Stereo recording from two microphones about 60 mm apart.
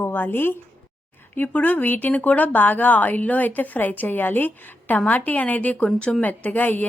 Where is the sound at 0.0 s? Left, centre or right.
Left.